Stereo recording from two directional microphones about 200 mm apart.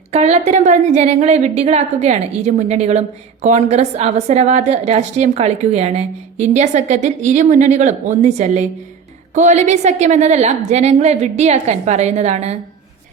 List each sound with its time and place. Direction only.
0.1 s a woman's voice: 35° right (ahead or behind)